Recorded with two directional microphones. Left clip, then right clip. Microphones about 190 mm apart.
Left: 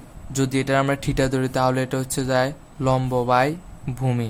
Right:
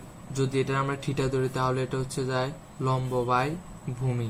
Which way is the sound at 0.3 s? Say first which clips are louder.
Left 6 dB; 50° left (ahead or behind).